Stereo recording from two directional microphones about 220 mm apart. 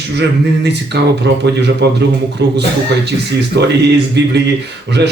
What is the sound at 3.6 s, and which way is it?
Speech, 50° right (ahead or behind).